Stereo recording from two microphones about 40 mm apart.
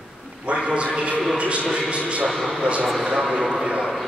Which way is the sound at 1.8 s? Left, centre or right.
Right.